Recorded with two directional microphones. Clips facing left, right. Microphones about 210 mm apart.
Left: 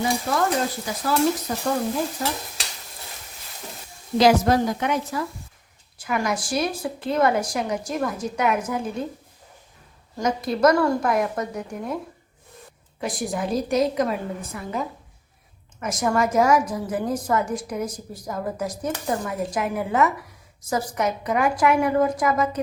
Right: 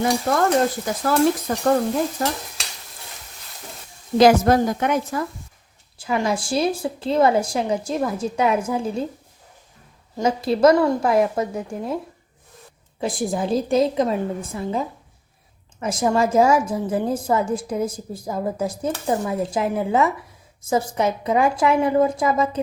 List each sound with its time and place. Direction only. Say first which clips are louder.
0.9 s a woman's voice: right 3 dB; 55° right (ahead or behind)
2.2 s stir: right 3 dB; 60° right (ahead or behind)
4.2 s a woman's voice: right 3 dB; 50° right (ahead or behind)
6.0 s a woman's voice: right 3 dB; 30° right (ahead or behind)
10.2 s a woman's voice: right 3 dB; 25° right (ahead or behind)
13.0 s a woman's voice: right 3 dB; 30° right (ahead or behind)